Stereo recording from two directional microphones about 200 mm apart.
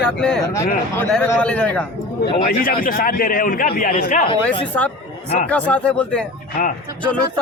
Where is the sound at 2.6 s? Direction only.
45° left (ahead or behind).